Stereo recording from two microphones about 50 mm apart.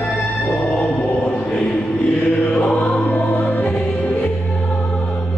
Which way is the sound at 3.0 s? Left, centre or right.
Left.